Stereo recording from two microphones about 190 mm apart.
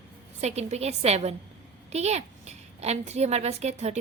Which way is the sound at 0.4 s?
35° right (ahead or behind).